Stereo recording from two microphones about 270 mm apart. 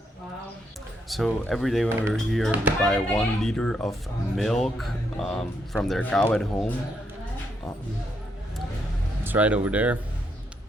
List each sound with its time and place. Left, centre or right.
1.0 s speech: centre
9.2 s speech: centre